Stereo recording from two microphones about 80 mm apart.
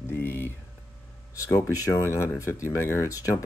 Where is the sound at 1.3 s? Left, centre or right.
Left.